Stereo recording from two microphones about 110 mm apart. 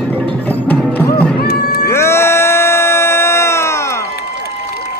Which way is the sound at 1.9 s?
25° left (ahead or behind).